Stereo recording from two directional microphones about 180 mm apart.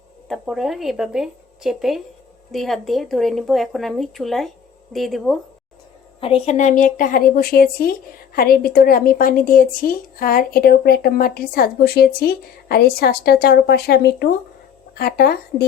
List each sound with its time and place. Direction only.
0.3 s speech: centre (ahead or behind)
6.1 s a woman's voice: 30° left (ahead or behind); by 15.6 s 60° left (ahead or behind)